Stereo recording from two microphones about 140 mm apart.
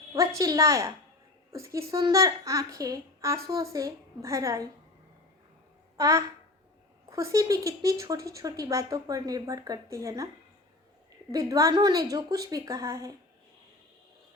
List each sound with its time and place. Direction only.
0.1 s a woman's voice: 25° right (ahead or behind)
6.0 s speech: 20° right (ahead or behind)
11.3 s speech: 25° right (ahead or behind)